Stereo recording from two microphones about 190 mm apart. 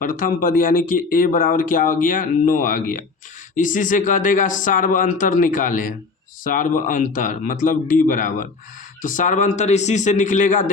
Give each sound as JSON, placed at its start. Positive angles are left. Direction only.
{"t": 0.0, "sound": "a man's voice", "side_deg": 45}